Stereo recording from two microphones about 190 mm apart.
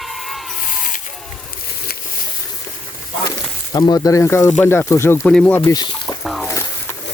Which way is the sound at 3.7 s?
20° left (ahead or behind).